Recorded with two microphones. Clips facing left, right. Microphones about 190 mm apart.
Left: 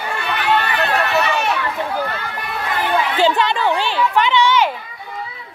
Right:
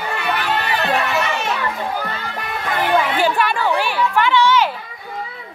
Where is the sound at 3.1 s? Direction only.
25° left (ahead or behind).